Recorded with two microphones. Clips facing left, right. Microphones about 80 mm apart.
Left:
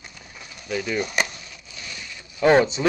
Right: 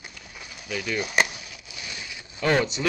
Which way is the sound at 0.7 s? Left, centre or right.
Centre.